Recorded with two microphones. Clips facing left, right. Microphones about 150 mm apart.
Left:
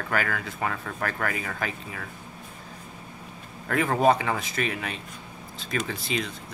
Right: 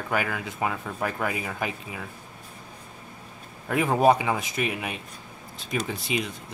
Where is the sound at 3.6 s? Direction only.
10° right (ahead or behind).